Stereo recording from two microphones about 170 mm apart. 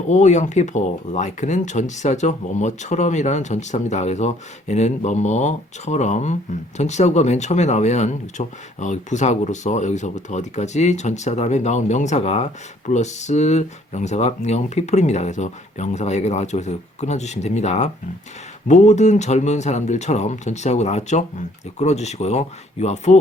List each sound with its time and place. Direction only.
0.1 s speech: 45° left (ahead or behind)